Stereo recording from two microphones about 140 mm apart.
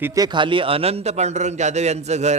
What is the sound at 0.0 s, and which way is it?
A man's voice, 25° right (ahead or behind).